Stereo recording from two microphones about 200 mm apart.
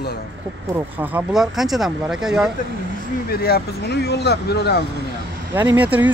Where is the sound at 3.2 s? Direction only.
50° left (ahead or behind).